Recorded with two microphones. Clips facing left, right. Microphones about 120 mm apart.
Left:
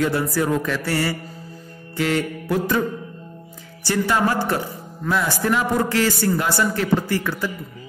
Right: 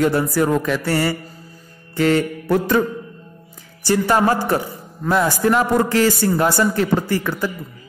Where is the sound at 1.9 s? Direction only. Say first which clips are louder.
Right 5 dB; 50° right (ahead or behind).